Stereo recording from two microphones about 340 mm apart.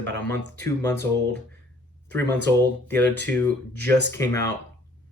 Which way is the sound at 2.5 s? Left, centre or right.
Centre.